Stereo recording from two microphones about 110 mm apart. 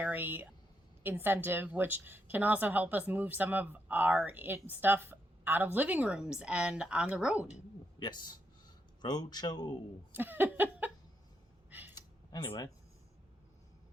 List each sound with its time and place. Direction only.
0.0 s a woman's voice: 15° right (ahead or behind)
7.9 s speech: 40° left (ahead or behind)
10.2 s a sound: 20° right (ahead or behind)
12.4 s speech: 25° left (ahead or behind)